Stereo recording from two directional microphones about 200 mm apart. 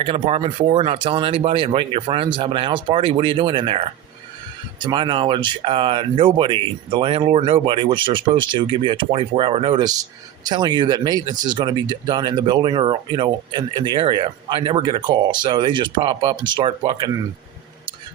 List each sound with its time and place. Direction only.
0.0 s speech: 25° right (ahead or behind)